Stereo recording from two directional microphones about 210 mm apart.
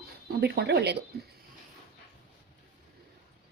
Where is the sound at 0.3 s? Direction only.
50° right (ahead or behind).